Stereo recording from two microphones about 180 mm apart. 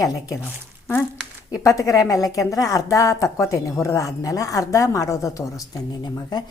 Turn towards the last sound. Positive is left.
turn(degrees=20)  # may be behind; listen again after turning